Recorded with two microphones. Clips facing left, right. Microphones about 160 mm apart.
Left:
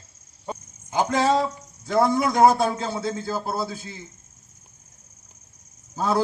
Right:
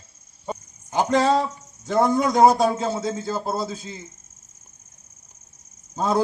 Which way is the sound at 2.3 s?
20° right (ahead or behind).